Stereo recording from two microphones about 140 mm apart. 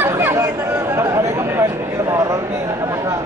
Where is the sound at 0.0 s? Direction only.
15° right (ahead or behind).